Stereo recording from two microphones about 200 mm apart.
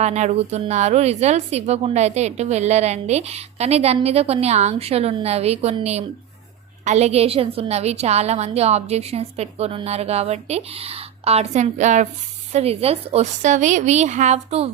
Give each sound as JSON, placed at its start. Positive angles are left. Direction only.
{"t": 0.0, "sound": "a woman's voice", "side_deg": -35}